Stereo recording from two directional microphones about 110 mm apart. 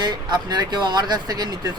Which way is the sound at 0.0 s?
40° right (ahead or behind).